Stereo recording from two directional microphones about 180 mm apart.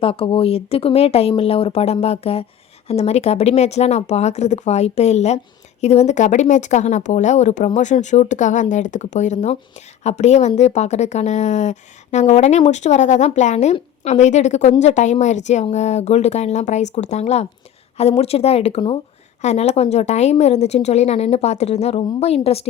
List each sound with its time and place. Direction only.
0.0 s speech: 30° left (ahead or behind)